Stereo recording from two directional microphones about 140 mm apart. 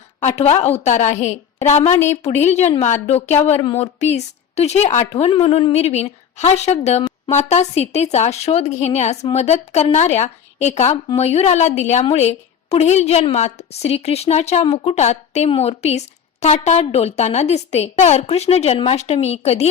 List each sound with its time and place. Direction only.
0.2 s a woman's voice: 55° left (ahead or behind)